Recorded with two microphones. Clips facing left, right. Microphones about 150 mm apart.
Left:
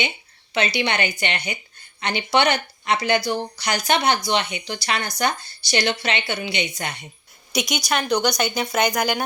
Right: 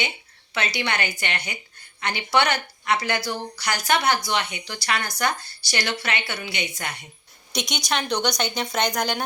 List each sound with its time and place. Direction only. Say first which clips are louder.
0.5 s speech: left 4 dB; 20° left (ahead or behind)
7.5 s speech: left 3 dB; 5° left (ahead or behind)